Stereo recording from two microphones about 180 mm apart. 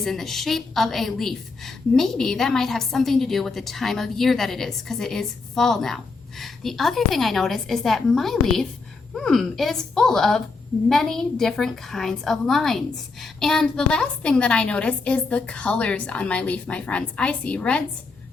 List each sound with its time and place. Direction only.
0.0 s a woman's voice: centre (ahead or behind)